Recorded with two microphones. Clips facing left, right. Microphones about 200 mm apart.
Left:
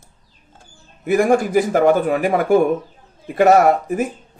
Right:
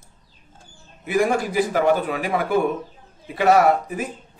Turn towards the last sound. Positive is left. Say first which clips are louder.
# left 4 dB
turn(degrees=45)  # may be behind; listen again after turning